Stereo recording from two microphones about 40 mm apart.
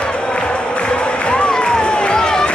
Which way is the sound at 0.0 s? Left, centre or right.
Left.